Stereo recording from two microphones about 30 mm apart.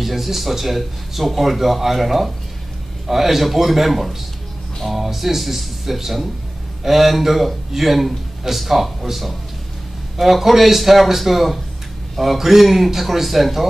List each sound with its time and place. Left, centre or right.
0.0 s a man's voice: centre